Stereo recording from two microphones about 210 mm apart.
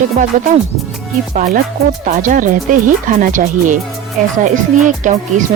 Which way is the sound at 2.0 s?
40° right (ahead or behind).